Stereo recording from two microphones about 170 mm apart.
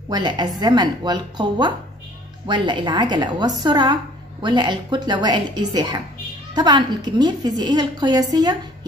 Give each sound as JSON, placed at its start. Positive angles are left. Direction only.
{"t": 0.1, "sound": "a woman's voice", "side_deg": -25}